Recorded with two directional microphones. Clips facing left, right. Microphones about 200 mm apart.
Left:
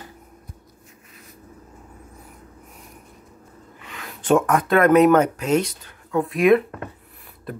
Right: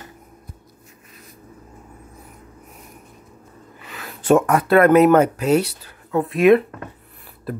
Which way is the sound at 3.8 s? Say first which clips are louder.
Right 3 dB; 5° right (ahead or behind).